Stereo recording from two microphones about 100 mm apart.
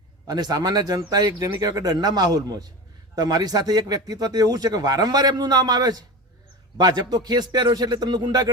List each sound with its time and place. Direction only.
0.3 s a man's voice: 40° right (ahead or behind)